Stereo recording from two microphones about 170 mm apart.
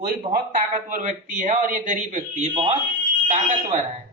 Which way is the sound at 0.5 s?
50° right (ahead or behind).